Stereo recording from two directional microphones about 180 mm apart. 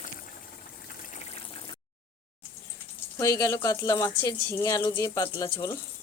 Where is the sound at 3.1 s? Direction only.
20° left (ahead or behind).